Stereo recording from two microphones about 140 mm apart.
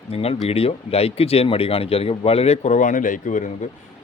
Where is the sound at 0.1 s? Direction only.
45° left (ahead or behind).